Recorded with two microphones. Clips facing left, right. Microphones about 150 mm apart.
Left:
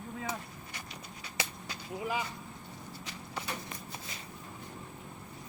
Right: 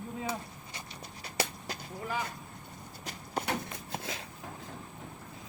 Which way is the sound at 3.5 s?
85° right.